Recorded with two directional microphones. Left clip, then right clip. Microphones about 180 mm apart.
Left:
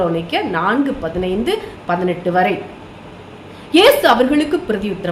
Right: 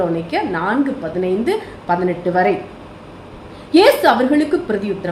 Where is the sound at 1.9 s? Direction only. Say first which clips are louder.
Even; 20° left (ahead or behind).